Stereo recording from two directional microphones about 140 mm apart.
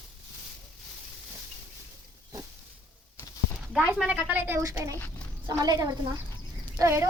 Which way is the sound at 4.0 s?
10° right (ahead or behind).